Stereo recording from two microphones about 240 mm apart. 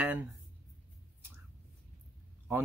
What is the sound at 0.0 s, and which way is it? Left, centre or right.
Speech, centre.